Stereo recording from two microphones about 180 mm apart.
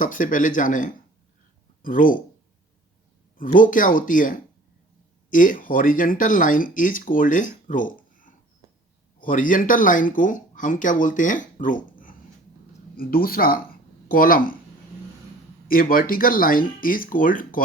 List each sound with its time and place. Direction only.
0.0 s speech: 50° left (ahead or behind)
3.3 s speech: 50° left (ahead or behind)
8.6 s a sound: 20° right (ahead or behind)
9.2 s speech: 50° left (ahead or behind)
15.6 s speech: 50° left (ahead or behind)